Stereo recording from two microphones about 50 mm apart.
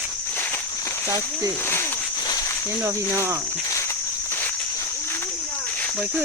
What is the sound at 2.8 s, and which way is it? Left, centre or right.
Speech, right.